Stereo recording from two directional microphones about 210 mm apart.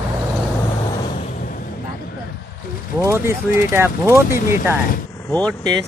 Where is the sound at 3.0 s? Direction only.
10° right (ahead or behind).